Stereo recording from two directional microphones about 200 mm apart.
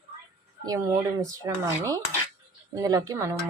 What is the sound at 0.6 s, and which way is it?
Speech, 15° right (ahead or behind).